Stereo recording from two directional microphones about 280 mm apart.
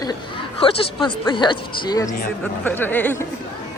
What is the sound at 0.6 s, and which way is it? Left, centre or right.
Speech, centre.